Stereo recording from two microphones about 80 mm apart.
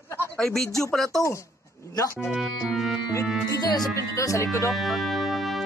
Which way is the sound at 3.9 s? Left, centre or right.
Left.